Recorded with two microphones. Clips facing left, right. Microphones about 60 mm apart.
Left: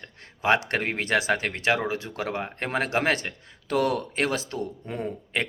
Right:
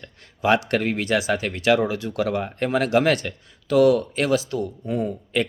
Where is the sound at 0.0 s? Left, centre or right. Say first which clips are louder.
Right 4 dB; left.